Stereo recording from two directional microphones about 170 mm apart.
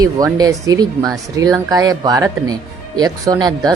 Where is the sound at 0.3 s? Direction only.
20° right (ahead or behind).